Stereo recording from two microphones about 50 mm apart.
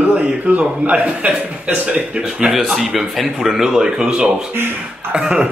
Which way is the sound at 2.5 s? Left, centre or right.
Centre.